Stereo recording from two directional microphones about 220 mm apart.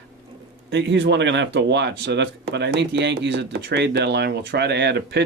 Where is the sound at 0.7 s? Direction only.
55° right (ahead or behind).